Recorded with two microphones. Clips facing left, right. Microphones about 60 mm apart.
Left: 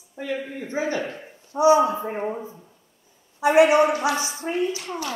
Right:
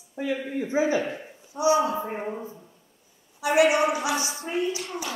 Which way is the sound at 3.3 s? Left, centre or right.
Left.